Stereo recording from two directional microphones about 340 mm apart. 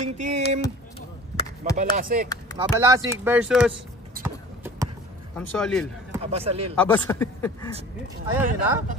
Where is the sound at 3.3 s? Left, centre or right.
Centre.